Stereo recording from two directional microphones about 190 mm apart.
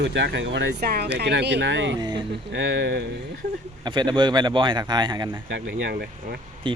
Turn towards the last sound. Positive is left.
turn(degrees=-25)  # may be behind; listen again after turning